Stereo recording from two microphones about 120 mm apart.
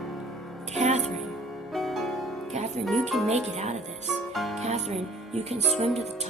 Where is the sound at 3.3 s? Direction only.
65° right (ahead or behind).